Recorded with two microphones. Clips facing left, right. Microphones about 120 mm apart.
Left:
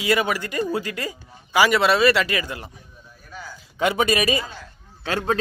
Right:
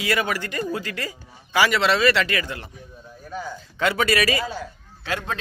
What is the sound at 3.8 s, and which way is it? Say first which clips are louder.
Speech: left 1 dB; 20° left (ahead or behind).